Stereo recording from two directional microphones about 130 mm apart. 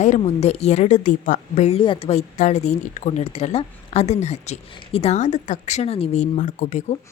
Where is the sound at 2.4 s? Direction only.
60° left (ahead or behind).